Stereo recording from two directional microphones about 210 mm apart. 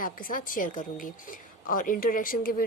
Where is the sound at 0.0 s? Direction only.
40° left (ahead or behind).